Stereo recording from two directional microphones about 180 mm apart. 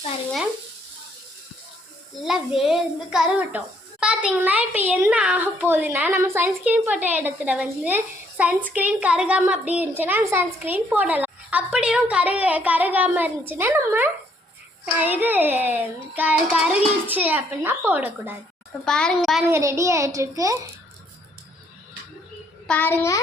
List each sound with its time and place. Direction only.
2.6 s a woman's voice: 5° right (ahead or behind)
18.9 s a woman's voice: 5° left (ahead or behind)
19.5 s a child's voice: 15° right (ahead or behind)
22.6 s child singing: 10° left (ahead or behind)